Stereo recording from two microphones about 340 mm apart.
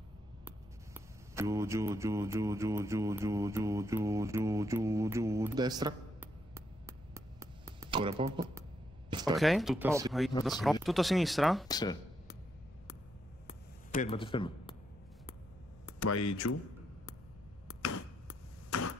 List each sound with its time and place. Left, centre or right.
0.5 s speech: centre
6.5 s a sound: centre
9.3 s speech: centre
11.6 s speech: centre
13.5 s a sound: centre
16.0 s speech: left
18.7 s arrow: left